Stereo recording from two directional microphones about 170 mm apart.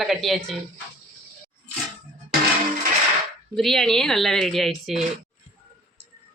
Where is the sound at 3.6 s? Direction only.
Centre (ahead or behind).